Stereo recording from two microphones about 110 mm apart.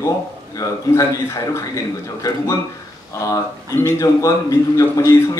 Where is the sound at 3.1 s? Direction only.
30° left (ahead or behind).